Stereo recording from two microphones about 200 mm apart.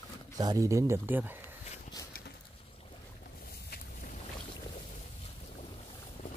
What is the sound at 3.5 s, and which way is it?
Boat, 45° left (ahead or behind).